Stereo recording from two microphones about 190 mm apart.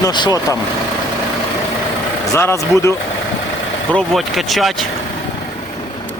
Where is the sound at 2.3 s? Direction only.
15° left (ahead or behind).